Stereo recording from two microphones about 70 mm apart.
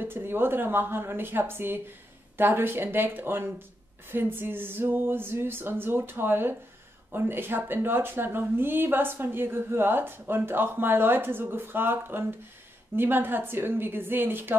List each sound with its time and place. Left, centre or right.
0.0 s speech: right